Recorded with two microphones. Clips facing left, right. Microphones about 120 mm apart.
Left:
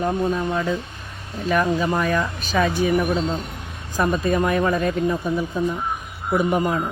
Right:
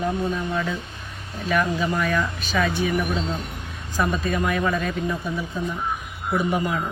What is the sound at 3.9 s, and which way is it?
Speech, 40° left (ahead or behind).